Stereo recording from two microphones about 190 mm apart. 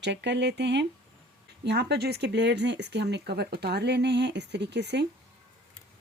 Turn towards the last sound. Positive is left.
turn(degrees=-65)  # may be behind; listen again after turning